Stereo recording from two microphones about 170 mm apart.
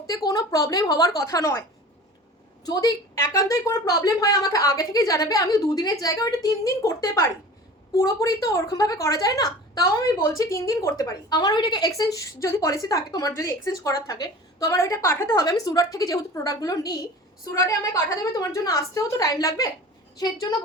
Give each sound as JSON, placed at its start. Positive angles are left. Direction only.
{"t": 0.3, "sound": "a woman's voice", "side_deg": 20}
{"t": 2.6, "sound": "a woman's voice", "side_deg": 20}